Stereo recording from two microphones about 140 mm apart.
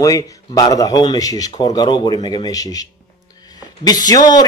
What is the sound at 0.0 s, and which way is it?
A man's voice, 25° left (ahead or behind).